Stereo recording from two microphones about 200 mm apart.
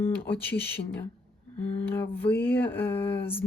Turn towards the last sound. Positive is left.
turn(degrees=10)  # may be behind; listen again after turning